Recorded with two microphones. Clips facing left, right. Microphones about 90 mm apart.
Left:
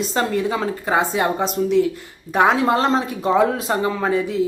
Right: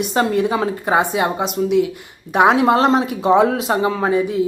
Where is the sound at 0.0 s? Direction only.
15° right (ahead or behind).